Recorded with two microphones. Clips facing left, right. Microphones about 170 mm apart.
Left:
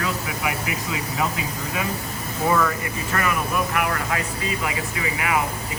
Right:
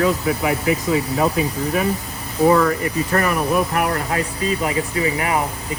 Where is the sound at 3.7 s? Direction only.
35° right (ahead or behind).